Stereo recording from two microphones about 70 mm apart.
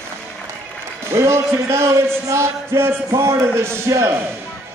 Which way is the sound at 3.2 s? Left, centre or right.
Right.